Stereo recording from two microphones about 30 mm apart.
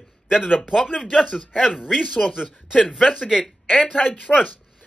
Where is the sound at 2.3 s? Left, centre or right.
Left.